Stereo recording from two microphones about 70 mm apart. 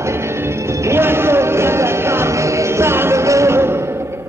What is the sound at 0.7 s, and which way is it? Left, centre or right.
Music, right.